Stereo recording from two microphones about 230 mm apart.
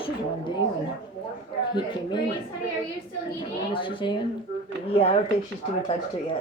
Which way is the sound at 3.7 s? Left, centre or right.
Left.